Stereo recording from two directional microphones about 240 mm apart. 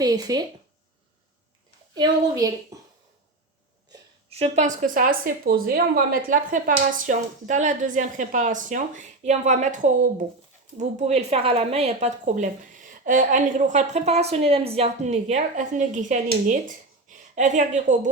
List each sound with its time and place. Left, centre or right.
0.0 s a woman's voice: centre
2.0 s a woman's voice: centre
4.3 s a woman's voice: right